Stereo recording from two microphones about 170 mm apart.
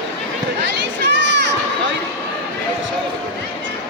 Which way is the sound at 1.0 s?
90° right.